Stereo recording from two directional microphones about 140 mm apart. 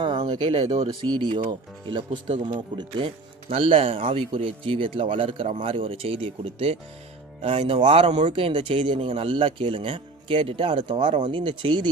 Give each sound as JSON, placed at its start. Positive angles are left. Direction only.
{"t": 0.0, "sound": "speech", "side_deg": -35}
{"t": 0.5, "sound": "speech", "side_deg": -55}
{"t": 1.2, "sound": "speech", "side_deg": -35}